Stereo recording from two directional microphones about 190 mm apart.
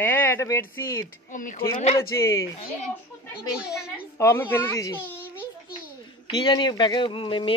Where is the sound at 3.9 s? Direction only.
15° left (ahead or behind).